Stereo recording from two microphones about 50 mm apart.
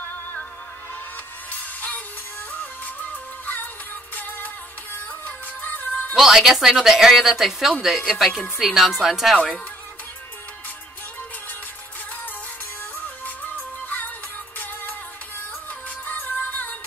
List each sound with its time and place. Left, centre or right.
1.5 s music: left
4.1 s music: left
6.1 s speech: centre
13.0 s music: left
16.1 s music: left